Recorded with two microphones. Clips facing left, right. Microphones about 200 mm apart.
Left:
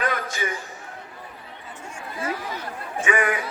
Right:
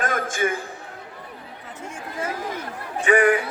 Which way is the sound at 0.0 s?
50° right (ahead or behind).